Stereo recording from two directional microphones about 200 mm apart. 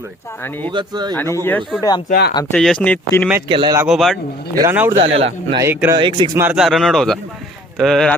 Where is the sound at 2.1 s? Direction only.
55° left (ahead or behind).